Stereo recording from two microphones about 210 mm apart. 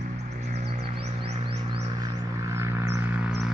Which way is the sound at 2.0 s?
15° right (ahead or behind).